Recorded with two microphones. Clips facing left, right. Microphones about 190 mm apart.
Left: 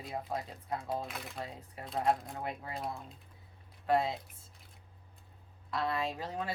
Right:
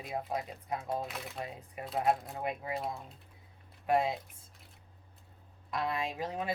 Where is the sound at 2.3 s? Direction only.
15° right (ahead or behind).